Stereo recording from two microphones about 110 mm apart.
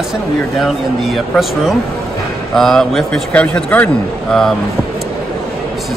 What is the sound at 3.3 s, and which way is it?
Speech, 15° left (ahead or behind).